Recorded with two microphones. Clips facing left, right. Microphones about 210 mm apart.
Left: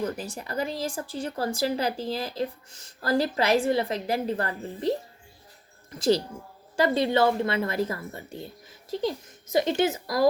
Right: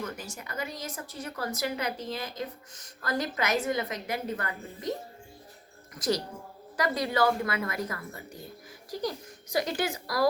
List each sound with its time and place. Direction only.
0.0 s a woman's voice: 35° left (ahead or behind)